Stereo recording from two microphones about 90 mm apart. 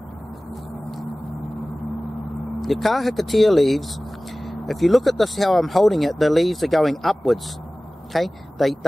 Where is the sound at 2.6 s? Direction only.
Centre (ahead or behind).